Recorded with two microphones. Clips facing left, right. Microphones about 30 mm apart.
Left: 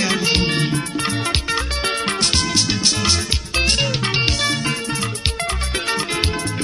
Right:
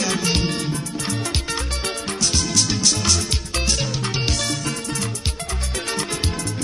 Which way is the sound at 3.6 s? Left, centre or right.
Left.